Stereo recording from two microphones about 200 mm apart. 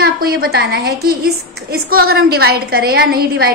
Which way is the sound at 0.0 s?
50° right (ahead or behind).